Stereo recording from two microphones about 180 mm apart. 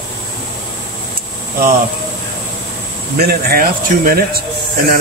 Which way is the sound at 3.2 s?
60° right (ahead or behind).